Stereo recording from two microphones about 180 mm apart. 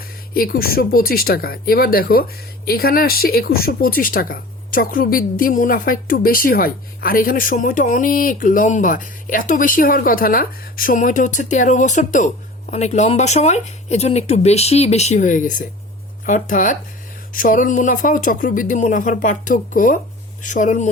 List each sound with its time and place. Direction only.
0.0 s speech: 55° left (ahead or behind)